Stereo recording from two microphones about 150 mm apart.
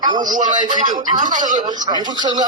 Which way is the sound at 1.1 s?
55° right (ahead or behind).